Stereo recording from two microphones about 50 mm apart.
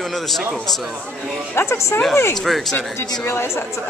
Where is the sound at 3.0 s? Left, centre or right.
Left.